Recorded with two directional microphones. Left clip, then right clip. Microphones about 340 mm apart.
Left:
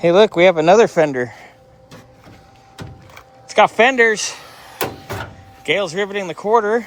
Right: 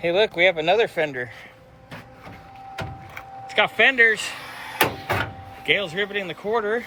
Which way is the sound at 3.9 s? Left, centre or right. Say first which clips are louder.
Left 3 dB; centre.